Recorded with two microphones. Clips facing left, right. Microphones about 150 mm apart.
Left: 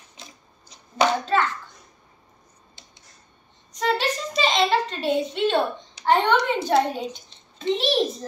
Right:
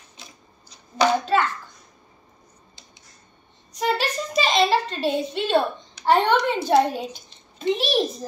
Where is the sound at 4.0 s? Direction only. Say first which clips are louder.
Even; 20° left (ahead or behind).